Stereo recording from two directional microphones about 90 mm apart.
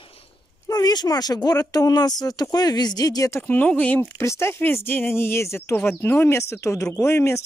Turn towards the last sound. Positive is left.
turn(degrees=30)  # may be behind; listen again after turning